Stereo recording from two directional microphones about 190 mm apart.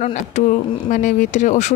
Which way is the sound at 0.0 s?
40° left (ahead or behind).